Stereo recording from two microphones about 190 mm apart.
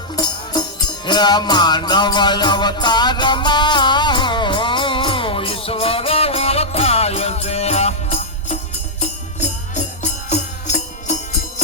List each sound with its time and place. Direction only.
1.0 s music: 20° left (ahead or behind)
9.7 s music: 40° left (ahead or behind)